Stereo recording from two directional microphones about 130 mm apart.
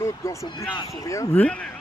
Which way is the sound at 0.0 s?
25° left (ahead or behind).